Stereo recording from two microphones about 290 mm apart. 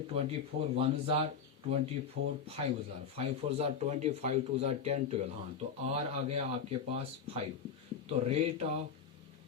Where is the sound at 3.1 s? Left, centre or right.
Right.